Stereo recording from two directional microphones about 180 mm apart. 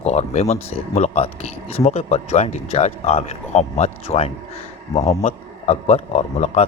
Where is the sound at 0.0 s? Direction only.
35° left (ahead or behind).